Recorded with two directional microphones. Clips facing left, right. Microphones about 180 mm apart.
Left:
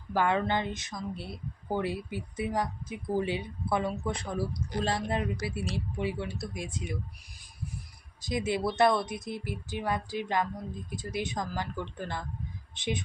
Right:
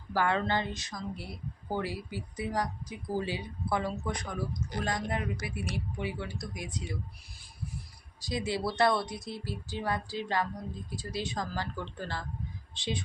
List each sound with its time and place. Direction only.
0.1 s speech: 20° left (ahead or behind)
8.2 s speech: 20° left (ahead or behind)